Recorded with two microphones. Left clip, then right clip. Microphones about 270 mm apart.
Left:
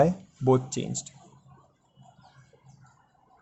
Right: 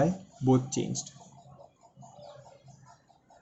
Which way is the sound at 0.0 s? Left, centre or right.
Left.